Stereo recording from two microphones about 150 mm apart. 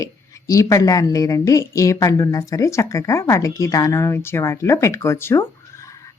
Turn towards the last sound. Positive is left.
turn(degrees=15)  # may be behind; listen again after turning